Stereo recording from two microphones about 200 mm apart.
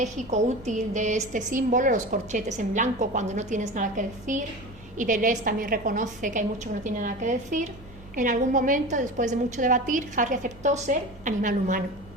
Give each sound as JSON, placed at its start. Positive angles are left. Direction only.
{"t": 0.0, "sound": "a woman's voice", "side_deg": -35}